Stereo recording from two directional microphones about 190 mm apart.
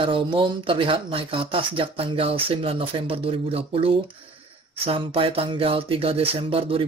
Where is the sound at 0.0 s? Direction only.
25° right (ahead or behind).